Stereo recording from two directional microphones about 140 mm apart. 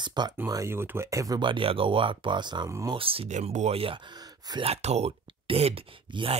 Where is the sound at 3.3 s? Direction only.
55° right (ahead or behind); by 4.6 s 30° right (ahead or behind).